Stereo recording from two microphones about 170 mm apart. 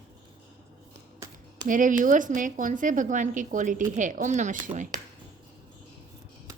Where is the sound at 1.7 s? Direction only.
50° right (ahead or behind).